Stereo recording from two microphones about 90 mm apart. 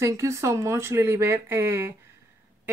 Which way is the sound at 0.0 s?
35° right (ahead or behind).